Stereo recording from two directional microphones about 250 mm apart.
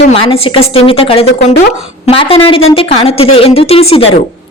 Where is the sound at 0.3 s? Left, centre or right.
Left.